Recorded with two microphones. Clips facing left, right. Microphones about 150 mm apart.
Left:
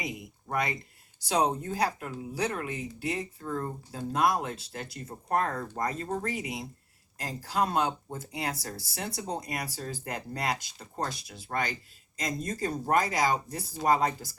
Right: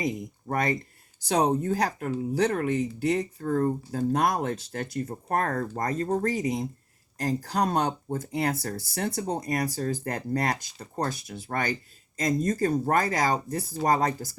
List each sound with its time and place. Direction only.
0.0 s speech: 45° right (ahead or behind)